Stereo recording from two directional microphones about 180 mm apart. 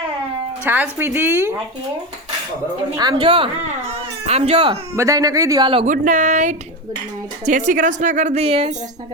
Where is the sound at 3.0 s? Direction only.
25° right (ahead or behind).